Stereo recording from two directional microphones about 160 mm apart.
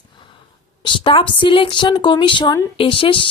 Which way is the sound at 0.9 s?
30° left (ahead or behind).